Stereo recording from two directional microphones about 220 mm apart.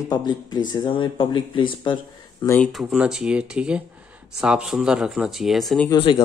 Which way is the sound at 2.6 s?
Centre (ahead or behind).